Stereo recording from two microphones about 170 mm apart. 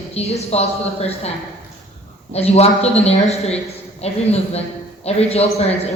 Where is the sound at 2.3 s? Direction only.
35° left (ahead or behind).